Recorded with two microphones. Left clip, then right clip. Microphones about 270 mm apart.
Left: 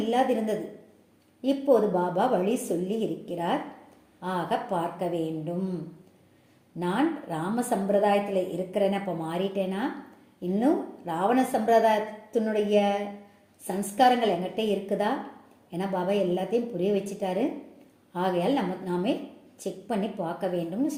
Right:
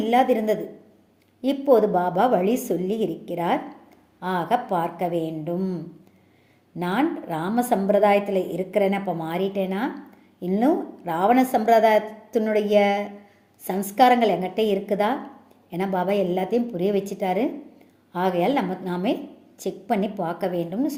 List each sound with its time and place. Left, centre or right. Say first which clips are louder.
0.1 s a woman's voice: right 6 dB; right
6.7 s a woman's voice: right 3 dB; right